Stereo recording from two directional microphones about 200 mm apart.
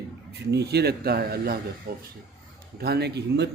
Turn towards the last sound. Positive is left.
turn(degrees=-55)  # may be behind; listen again after turning